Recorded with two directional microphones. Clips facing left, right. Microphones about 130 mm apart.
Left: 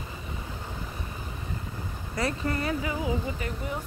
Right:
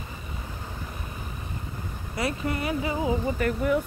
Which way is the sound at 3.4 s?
60° right (ahead or behind).